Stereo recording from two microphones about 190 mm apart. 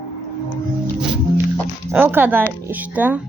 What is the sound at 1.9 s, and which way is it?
Speech, 10° right (ahead or behind).